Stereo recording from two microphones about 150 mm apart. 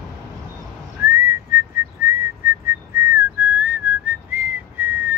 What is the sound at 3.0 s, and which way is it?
Whistling, 20° right (ahead or behind).